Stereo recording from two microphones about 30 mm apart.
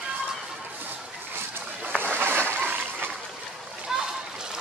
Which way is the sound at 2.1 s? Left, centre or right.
Right.